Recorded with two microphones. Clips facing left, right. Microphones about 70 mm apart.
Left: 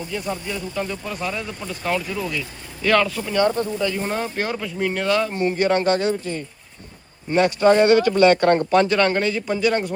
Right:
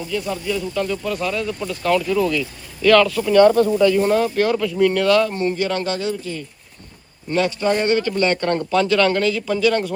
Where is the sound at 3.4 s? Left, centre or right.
Right.